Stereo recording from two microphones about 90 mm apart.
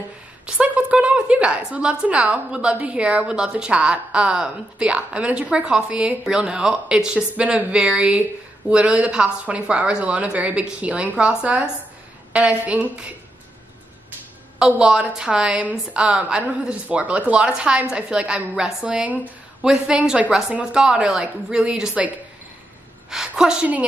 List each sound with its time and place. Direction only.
0.5 s a woman's voice: 15° right (ahead or behind)
14.6 s a woman's voice: 10° right (ahead or behind)